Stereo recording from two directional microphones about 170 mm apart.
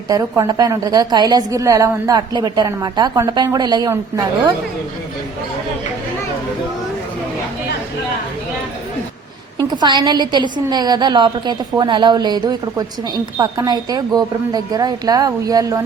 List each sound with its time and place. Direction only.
0.1 s a woman's voice: 20° right (ahead or behind)
9.6 s a woman's voice: 25° right (ahead or behind)